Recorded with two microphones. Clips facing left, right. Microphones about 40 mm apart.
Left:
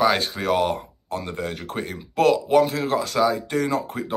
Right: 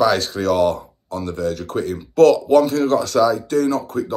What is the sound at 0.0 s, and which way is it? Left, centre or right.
Speech, centre.